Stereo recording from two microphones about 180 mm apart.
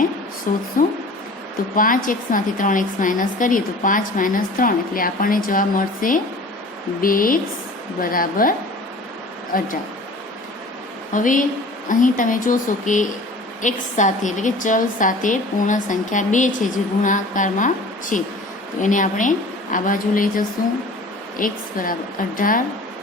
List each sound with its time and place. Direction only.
0.5 s a woman's voice: 50° left (ahead or behind)
1.7 s a woman's voice: 50° left (ahead or behind)
11.1 s a woman's voice: 45° left (ahead or behind)